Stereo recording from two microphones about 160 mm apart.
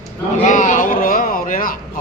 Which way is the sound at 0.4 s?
55° left (ahead or behind).